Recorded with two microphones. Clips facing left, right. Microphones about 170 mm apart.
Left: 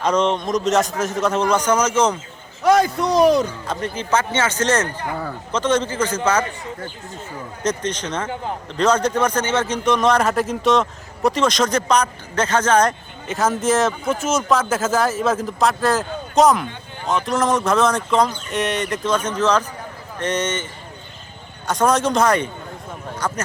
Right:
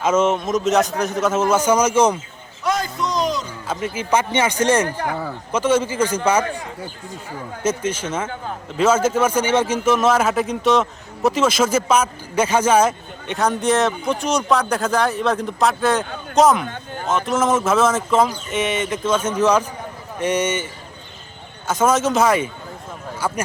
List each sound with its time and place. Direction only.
0.0 s a man's voice: 5° right (ahead or behind)
2.8 s speech: 60° left (ahead or behind)
3.7 s speech: 5° right (ahead or behind)
7.6 s a man's voice: 5° right (ahead or behind)
21.7 s a man's voice: centre (ahead or behind)